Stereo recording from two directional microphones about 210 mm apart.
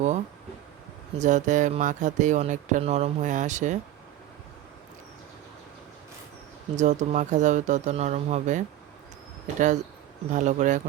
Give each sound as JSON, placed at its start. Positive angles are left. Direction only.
{"t": 1.2, "sound": "speech", "side_deg": -35}
{"t": 6.7, "sound": "speech", "side_deg": -35}